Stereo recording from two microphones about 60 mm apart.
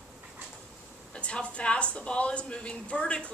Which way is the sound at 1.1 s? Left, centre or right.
Centre.